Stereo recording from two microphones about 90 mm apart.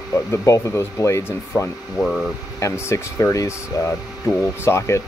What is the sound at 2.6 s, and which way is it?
Speech, 30° left (ahead or behind).